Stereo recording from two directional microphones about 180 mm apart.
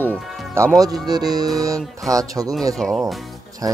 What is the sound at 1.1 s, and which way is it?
Speech, 20° right (ahead or behind).